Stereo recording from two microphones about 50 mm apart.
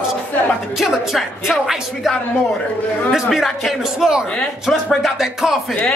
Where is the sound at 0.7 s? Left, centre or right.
Centre.